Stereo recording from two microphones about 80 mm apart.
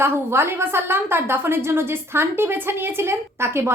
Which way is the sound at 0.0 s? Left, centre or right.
Right.